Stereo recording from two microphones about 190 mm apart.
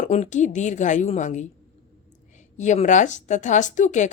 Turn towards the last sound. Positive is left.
turn(degrees=40)  # may be behind; listen again after turning